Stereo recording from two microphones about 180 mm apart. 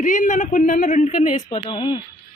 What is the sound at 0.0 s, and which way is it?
A man's voice, 45° left (ahead or behind).